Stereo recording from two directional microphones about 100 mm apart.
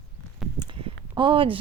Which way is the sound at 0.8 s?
60° right (ahead or behind).